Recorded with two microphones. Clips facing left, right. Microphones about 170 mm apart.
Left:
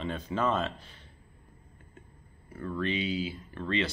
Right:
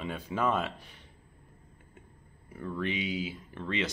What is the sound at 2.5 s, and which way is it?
Speech, 15° right (ahead or behind).